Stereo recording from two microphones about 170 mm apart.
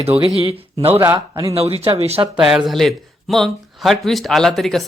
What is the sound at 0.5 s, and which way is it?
Speech, 35° right (ahead or behind).